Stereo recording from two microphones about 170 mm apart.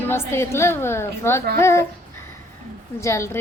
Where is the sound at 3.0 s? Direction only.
15° left (ahead or behind).